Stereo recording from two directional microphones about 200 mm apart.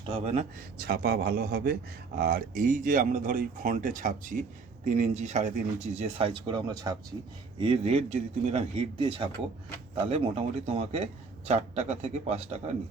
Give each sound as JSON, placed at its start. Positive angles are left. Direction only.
{"t": 0.0, "sound": "speech", "side_deg": -30}
{"t": 0.8, "sound": "a man's voice", "side_deg": -50}